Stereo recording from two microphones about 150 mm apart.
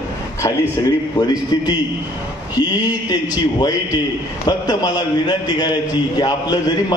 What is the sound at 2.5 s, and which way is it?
A man's voice, 25° left (ahead or behind).